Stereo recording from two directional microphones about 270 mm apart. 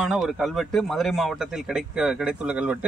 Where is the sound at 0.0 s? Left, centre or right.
Centre.